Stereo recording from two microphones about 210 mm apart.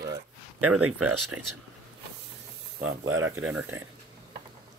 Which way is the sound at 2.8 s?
70° right (ahead or behind).